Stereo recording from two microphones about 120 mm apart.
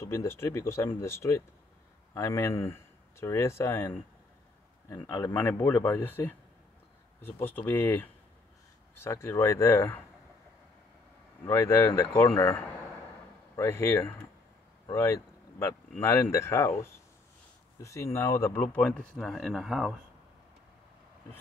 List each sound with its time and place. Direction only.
0.0 s a man's voice: 25° left (ahead or behind)
11.4 s speech: 20° left (ahead or behind); by 20.0 s 5° right (ahead or behind)